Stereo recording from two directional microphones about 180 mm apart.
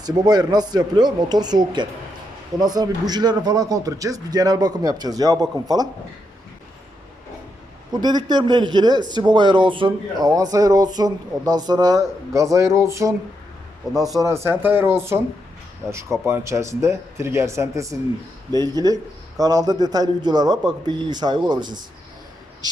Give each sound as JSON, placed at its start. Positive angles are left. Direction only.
{"t": 0.0, "sound": "a man's voice", "side_deg": -20}
{"t": 8.0, "sound": "a man's voice", "side_deg": -25}